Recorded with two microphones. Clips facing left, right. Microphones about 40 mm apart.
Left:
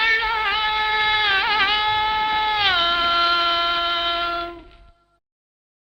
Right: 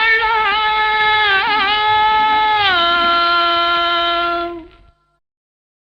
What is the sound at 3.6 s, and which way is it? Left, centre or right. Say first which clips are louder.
Music: right 6 dB; right.